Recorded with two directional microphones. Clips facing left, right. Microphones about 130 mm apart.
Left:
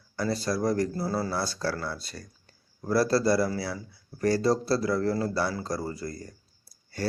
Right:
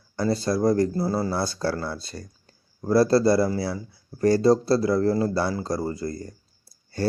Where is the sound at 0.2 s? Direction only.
25° right (ahead or behind).